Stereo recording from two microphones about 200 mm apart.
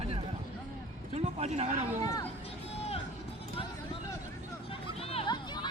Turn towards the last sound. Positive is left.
turn(degrees=20)  # may be behind; listen again after turning